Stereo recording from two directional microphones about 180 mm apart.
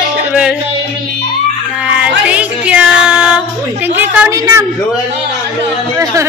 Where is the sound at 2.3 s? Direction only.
5° right (ahead or behind).